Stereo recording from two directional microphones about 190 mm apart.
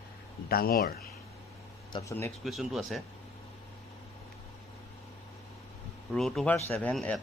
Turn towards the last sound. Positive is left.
turn(degrees=5)  # may be behind; listen again after turning